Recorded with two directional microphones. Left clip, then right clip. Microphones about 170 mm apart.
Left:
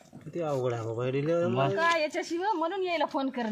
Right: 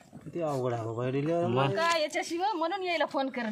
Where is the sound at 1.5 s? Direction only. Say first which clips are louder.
Even; 50° right (ahead or behind).